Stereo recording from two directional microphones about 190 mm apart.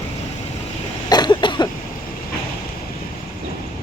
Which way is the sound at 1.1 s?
25° left (ahead or behind).